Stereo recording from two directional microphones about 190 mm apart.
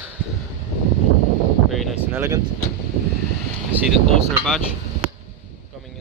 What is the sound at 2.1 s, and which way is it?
Speech, 15° right (ahead or behind).